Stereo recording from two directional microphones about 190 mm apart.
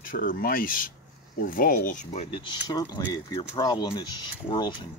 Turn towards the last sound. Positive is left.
turn(degrees=25)  # may be behind; listen again after turning